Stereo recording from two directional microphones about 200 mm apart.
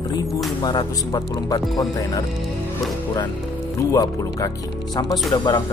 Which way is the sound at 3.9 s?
15° left (ahead or behind).